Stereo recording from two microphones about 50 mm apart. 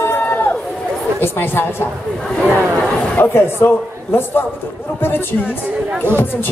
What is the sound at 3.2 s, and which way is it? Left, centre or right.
A man's voice, left.